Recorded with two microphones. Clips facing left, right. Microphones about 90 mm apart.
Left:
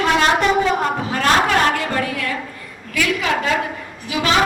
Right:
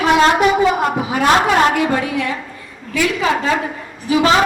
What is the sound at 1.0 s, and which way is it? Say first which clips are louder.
A man's voice: right 3 dB; 15° right (ahead or behind).